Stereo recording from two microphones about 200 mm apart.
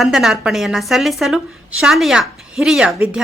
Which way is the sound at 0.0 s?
Centre (ahead or behind).